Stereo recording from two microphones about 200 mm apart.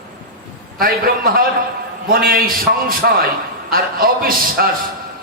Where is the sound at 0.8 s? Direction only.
45° right (ahead or behind).